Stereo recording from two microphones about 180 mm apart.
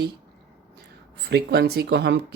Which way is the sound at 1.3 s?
70° right (ahead or behind).